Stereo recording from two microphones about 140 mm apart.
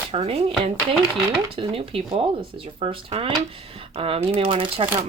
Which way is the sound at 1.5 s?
40° right (ahead or behind).